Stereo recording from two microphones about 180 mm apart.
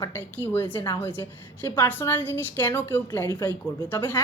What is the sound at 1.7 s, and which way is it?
A woman's voice, 10° left (ahead or behind).